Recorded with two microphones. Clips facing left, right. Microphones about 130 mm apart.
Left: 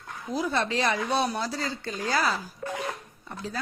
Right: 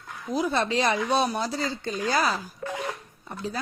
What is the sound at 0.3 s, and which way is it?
Speech, 20° right (ahead or behind).